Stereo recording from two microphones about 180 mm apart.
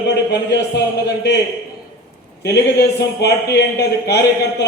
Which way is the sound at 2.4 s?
65° left (ahead or behind).